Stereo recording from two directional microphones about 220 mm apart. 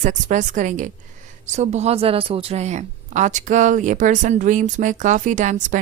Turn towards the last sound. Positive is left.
turn(degrees=-35)  # may be behind; listen again after turning